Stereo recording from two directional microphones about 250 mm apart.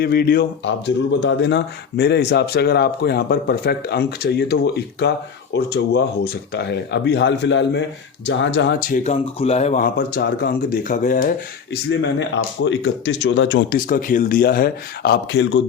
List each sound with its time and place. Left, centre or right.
0.0 s a man's voice: left
9.0 s speech: left